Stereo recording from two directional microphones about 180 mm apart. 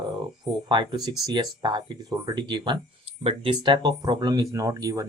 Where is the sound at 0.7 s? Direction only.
25° right (ahead or behind).